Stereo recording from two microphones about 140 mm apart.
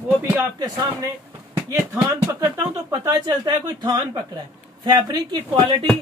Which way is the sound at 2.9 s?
25° right (ahead or behind).